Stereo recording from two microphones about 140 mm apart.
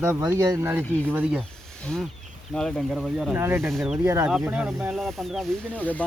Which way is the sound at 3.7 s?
Centre (ahead or behind).